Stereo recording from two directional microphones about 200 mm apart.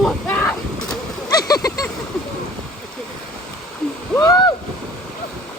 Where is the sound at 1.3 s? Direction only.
20° left (ahead or behind).